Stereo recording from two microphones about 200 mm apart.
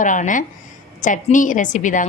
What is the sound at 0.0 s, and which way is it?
A woman's voice, 40° left (ahead or behind).